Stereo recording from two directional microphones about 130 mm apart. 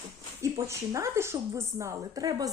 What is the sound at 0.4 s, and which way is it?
A woman's voice, 25° right (ahead or behind).